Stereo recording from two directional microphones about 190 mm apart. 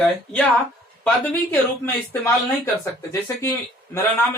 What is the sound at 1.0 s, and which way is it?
Speech, 10° left (ahead or behind).